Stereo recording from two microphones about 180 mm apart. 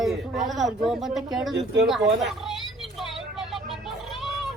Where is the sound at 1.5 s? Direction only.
75° right (ahead or behind).